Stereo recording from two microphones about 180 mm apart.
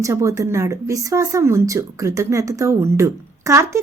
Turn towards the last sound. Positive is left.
turn(degrees=-15)  # may be behind; listen again after turning